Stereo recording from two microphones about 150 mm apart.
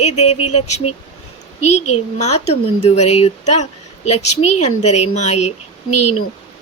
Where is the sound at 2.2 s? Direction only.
45° left (ahead or behind).